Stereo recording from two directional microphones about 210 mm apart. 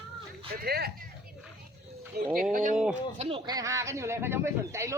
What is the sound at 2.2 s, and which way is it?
Speech, 50° right (ahead or behind).